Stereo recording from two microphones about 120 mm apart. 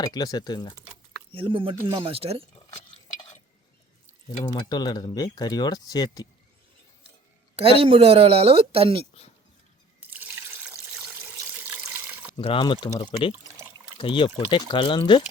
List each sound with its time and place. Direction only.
0.0 s speech: 35° left (ahead or behind)
1.3 s a woman's voice: 50° right (ahead or behind)
2.9 s stir: 35° left (ahead or behind)
4.4 s speech: 35° left (ahead or behind)
7.6 s a woman's voice: 50° right (ahead or behind)
10.1 s water: 15° right (ahead or behind)
12.4 s speech: 45° left (ahead or behind)
14.0 s speech: 45° left (ahead or behind)